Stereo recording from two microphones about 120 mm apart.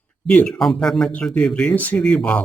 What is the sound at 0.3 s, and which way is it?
Speech, 10° left (ahead or behind).